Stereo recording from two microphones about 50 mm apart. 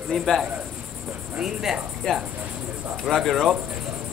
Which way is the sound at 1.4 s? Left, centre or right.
Centre.